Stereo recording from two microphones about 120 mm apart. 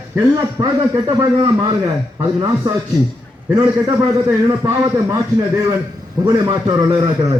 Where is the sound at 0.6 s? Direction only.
30° right (ahead or behind).